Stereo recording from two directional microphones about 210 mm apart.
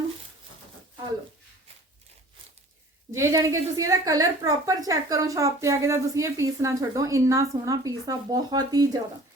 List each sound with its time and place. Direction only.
3.1 s a woman's voice: 15° right (ahead or behind)